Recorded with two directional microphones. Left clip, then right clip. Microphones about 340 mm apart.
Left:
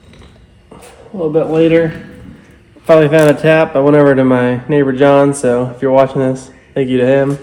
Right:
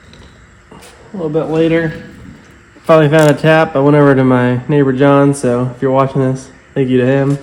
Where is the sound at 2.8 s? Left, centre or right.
Right.